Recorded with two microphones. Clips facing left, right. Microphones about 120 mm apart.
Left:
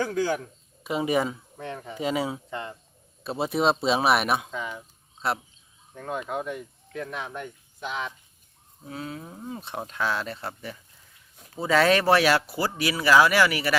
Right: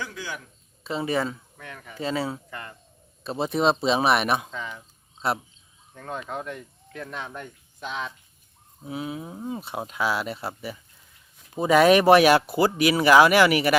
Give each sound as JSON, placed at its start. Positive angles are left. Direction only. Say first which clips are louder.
{"t": 0.0, "sound": "speech", "louder": "left 9 dB", "side_deg": 45}
{"t": 0.9, "sound": "speech", "louder": "left 1 dB", "side_deg": 15}
{"t": 1.5, "sound": "speech", "louder": "left 7 dB", "side_deg": 30}
{"t": 2.0, "sound": "speech", "louder": "even", "side_deg": 15}
{"t": 3.2, "sound": "speech", "louder": "right 1 dB", "side_deg": 5}
{"t": 5.9, "sound": "speech", "louder": "left 2 dB", "side_deg": 5}
{"t": 8.8, "sound": "speech", "louder": "right 4 dB", "side_deg": -15}